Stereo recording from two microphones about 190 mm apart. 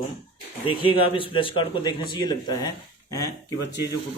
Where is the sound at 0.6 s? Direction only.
30° left (ahead or behind).